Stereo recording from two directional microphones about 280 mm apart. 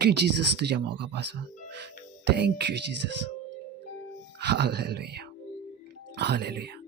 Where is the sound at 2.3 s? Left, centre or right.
Right.